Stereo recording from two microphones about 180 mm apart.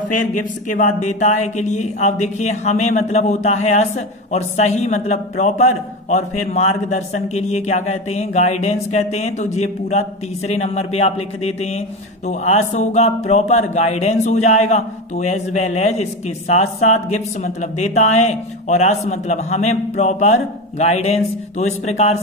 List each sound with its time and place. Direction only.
0.1 s speech: 45° left (ahead or behind)